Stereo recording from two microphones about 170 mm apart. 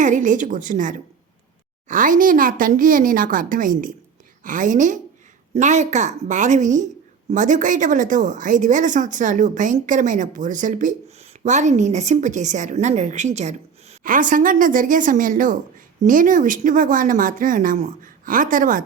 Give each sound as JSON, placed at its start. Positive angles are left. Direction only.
{"t": 0.0, "sound": "speech", "side_deg": -50}